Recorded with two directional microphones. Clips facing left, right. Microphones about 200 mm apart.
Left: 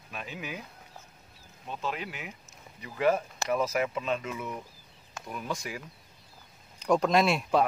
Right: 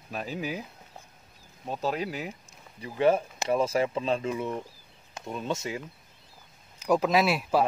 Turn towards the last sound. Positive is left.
turn(degrees=-5)  # may be behind; listen again after turning